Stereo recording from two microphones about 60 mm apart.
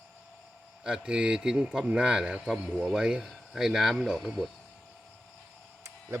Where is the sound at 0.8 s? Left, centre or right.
Centre.